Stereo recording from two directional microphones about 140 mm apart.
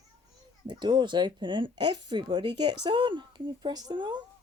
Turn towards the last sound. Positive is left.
turn(degrees=-30)  # may be behind; listen again after turning